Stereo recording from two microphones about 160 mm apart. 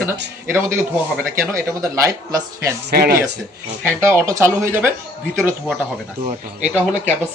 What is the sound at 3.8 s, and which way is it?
Speech, 15° right (ahead or behind).